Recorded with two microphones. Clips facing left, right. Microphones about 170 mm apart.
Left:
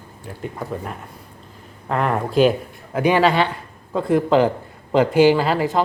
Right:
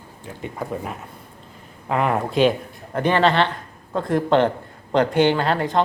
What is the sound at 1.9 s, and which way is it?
A man's voice, centre (ahead or behind).